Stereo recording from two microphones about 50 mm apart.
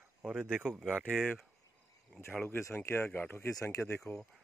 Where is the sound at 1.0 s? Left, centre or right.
Left.